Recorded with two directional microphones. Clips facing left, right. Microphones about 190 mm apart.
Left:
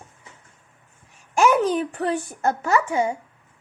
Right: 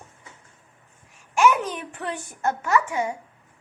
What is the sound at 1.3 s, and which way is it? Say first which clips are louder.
A woman's voice: left 3 dB; 35° left (ahead or behind).